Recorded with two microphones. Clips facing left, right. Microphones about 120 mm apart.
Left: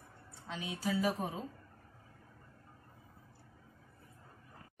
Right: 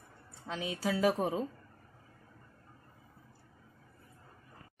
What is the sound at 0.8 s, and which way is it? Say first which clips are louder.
Speech: right 4 dB; 85° right.